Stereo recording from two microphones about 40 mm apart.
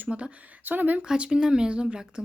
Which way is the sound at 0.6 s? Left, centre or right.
Right.